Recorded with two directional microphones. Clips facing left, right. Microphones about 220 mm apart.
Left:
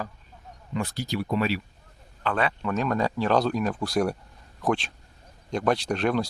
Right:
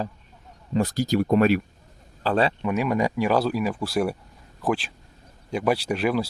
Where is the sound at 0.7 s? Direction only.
40° right (ahead or behind).